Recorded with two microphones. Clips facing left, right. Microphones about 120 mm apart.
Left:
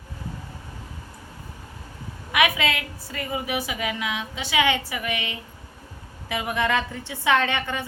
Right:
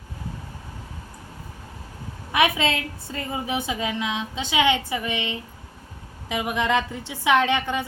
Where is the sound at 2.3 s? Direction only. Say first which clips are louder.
Right 1 dB; 30° right (ahead or behind).